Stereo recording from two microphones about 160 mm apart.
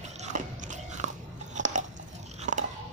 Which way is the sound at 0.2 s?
50° right (ahead or behind).